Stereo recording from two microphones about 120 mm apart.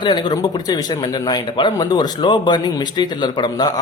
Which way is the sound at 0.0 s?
35° left (ahead or behind).